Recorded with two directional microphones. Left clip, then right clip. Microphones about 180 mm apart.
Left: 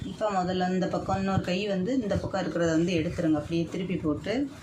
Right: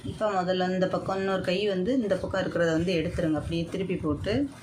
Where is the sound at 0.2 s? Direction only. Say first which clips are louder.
Right 1 dB; 30° right (ahead or behind).